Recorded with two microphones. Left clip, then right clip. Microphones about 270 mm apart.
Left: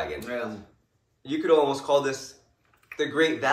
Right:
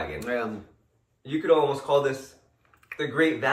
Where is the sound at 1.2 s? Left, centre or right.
Left.